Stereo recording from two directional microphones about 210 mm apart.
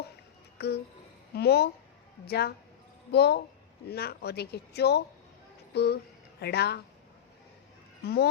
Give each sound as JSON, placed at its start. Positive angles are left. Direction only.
{"t": 0.6, "sound": "a sound", "side_deg": 50}
{"t": 1.3, "sound": "speech", "side_deg": 50}
{"t": 8.0, "sound": "speech", "side_deg": 50}